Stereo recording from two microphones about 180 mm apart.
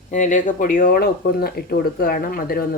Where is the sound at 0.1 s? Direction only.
45° left (ahead or behind).